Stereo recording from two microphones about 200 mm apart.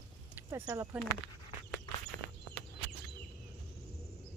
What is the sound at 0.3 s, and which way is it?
Speech, 15° right (ahead or behind).